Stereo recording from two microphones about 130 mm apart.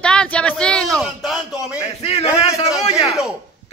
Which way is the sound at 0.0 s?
5° left (ahead or behind).